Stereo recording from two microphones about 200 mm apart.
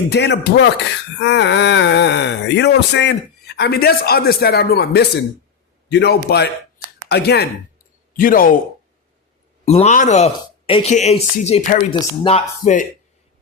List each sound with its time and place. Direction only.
0.1 s speech: 55° left (ahead or behind)
9.6 s speech: 35° left (ahead or behind)